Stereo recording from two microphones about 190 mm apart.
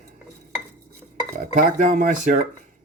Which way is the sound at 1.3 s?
40° right (ahead or behind).